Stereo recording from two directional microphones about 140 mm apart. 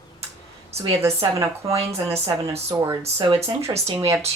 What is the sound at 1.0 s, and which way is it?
Speech, 20° right (ahead or behind).